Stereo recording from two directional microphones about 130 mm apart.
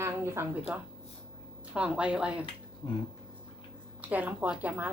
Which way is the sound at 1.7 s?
10° right (ahead or behind).